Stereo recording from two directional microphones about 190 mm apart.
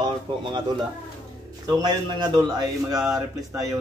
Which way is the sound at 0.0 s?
25° right (ahead or behind).